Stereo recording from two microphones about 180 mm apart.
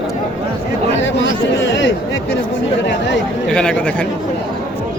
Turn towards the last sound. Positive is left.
turn(degrees=5)  # may be behind; listen again after turning